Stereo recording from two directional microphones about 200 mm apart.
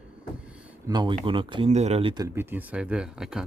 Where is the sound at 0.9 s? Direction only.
25° right (ahead or behind).